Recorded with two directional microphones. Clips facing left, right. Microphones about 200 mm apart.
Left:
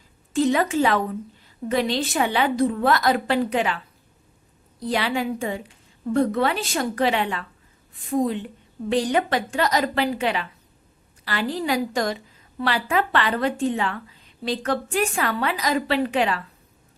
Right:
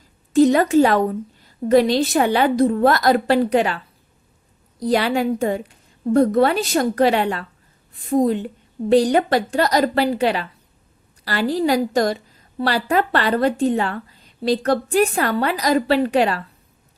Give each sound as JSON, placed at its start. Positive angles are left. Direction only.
{"t": 0.3, "sound": "a woman's voice", "side_deg": -40}
{"t": 4.8, "sound": "a woman's voice", "side_deg": -40}